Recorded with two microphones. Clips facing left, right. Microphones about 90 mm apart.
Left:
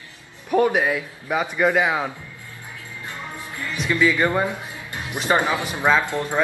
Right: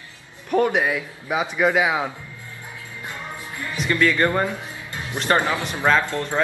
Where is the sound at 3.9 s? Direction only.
10° left (ahead or behind).